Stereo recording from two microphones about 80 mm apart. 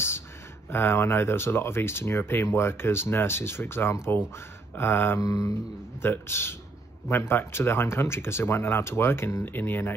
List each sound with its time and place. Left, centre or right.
0.7 s speech: left
5.2 s mantra: left
6.0 s speech: left